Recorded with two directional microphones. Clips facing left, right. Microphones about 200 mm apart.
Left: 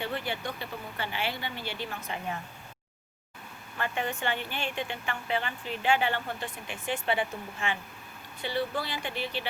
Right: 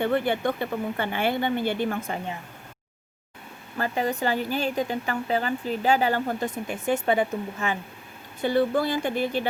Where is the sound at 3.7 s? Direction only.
35° right (ahead or behind).